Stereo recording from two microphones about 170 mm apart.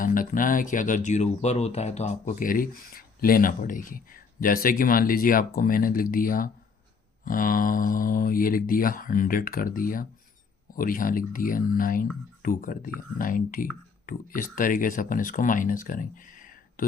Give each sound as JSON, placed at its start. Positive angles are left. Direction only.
{"t": 0.0, "sound": "speech", "side_deg": 55}